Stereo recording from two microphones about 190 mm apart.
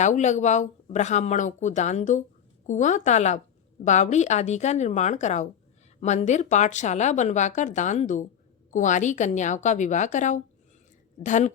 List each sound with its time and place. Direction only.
0.0 s speech: 40° left (ahead or behind)